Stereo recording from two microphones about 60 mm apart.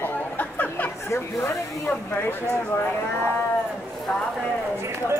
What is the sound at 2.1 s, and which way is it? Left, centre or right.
Speech, left.